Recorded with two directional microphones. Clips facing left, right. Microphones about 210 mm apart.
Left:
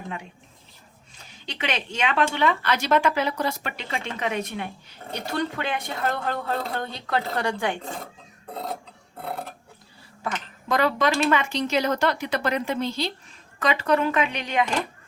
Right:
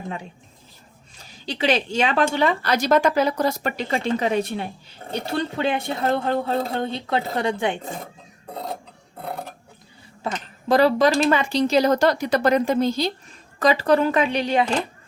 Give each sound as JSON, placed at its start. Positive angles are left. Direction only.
{"t": 1.5, "sound": "speech", "side_deg": -35}
{"t": 10.3, "sound": "speech", "side_deg": -35}